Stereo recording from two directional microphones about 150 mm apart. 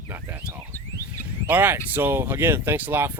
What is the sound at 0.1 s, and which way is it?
Speech, 10° right (ahead or behind).